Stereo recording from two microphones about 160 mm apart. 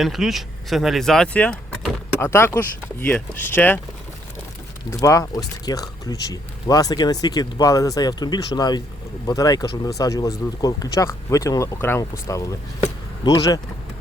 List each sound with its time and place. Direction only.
0.0 s speech: centre (ahead or behind)
2.2 s speech: 15° left (ahead or behind)
4.9 s speech: 20° left (ahead or behind)